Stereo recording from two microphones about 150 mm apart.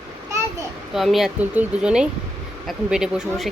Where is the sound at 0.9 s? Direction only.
Centre (ahead or behind).